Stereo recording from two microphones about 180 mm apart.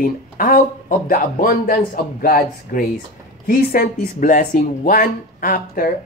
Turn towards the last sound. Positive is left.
turn(degrees=50)  # may be behind; listen again after turning